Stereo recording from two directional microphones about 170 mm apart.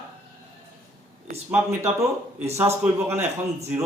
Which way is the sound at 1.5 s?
15° right (ahead or behind).